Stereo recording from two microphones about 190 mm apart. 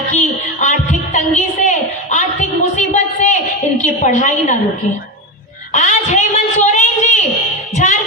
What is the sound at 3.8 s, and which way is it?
Speech, 40° left (ahead or behind).